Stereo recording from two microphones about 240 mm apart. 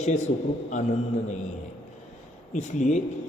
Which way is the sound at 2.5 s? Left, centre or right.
Left.